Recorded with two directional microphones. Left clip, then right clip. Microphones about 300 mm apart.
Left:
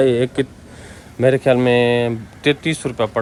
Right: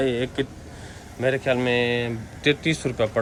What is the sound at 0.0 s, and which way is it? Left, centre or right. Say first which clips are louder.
Speech: left 8 dB; centre.